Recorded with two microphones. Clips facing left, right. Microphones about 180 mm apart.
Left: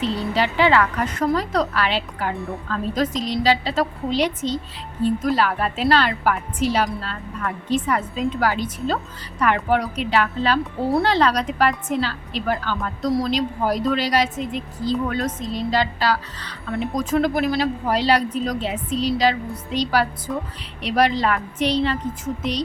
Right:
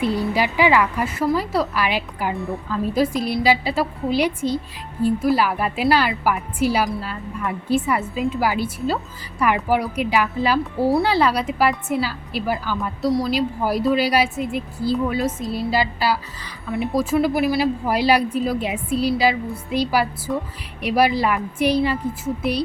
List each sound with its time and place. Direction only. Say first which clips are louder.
0.0 s speech: right 1 dB; 10° right (ahead or behind)